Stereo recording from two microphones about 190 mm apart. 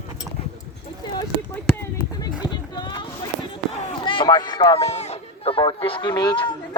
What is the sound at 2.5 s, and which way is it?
Speech, 20° left (ahead or behind).